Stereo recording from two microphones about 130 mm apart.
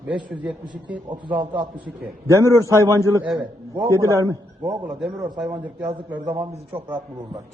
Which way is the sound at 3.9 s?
25° right (ahead or behind).